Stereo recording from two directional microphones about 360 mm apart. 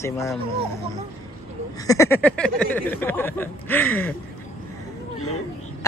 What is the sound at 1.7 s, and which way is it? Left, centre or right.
Speech, centre.